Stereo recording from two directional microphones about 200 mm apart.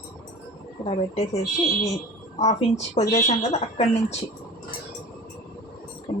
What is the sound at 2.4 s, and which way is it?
Speech, 30° left (ahead or behind).